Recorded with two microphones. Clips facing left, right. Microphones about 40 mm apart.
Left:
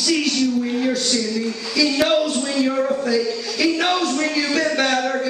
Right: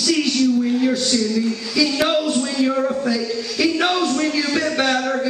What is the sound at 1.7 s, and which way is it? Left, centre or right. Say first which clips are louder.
A man's voice: left 1 dB; centre.